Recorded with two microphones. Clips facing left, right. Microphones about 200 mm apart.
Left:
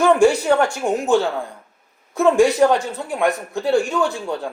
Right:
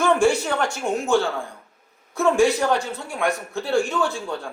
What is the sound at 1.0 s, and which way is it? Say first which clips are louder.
Speech: left 2 dB; 20° left (ahead or behind).